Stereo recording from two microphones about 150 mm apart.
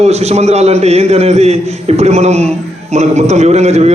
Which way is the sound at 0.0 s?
45° right (ahead or behind).